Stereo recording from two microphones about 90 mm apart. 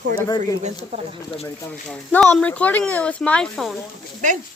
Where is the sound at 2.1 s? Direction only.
20° left (ahead or behind); by 3.8 s 5° left (ahead or behind).